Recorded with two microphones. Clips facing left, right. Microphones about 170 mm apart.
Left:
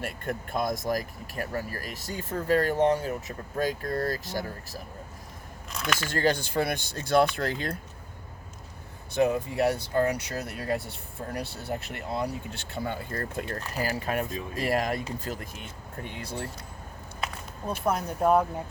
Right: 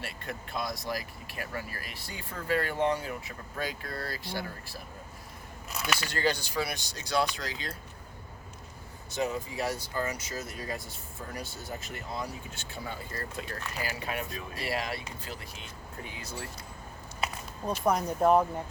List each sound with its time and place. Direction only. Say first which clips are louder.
0.0 s speech: left 6 dB; 50° left (ahead or behind)
5.7 s a sound: left 2 dB; 5° right (ahead or behind)
6.0 s speech: left 6 dB; 50° left (ahead or behind)
9.1 s speech: left 7 dB; 60° left (ahead or behind)
13.6 s speech: left 6 dB; 35° left (ahead or behind)
17.8 s speech: even; 5° left (ahead or behind)